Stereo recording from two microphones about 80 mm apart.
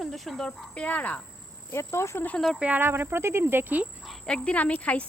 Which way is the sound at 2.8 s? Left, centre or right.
Right.